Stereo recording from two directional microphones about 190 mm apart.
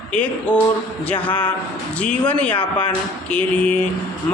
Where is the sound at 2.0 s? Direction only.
5° left (ahead or behind).